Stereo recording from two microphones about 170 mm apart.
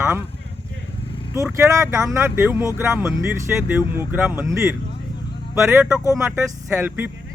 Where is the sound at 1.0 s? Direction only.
30° left (ahead or behind).